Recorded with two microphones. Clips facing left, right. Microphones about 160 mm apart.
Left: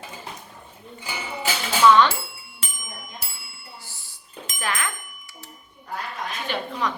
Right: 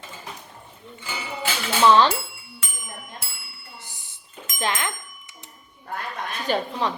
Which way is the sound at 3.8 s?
20° right (ahead or behind).